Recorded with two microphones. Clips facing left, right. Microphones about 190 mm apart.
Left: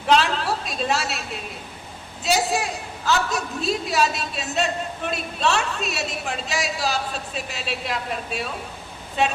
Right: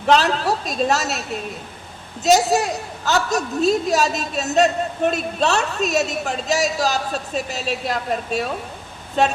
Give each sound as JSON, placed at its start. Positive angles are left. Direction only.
{"t": 0.1, "sound": "a woman's voice", "side_deg": -40}